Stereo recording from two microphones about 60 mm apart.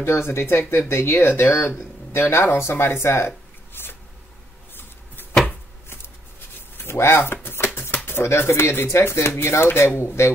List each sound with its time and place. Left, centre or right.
0.0 s speech: left
3.8 s a sound: left
6.8 s speech: left